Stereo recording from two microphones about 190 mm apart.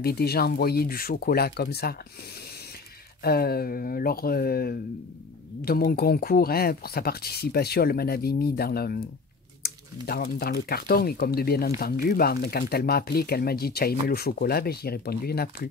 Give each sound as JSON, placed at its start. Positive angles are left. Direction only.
{"t": 0.0, "sound": "speech", "side_deg": 55}
{"t": 3.3, "sound": "speech", "side_deg": 55}
{"t": 10.0, "sound": "speech", "side_deg": 55}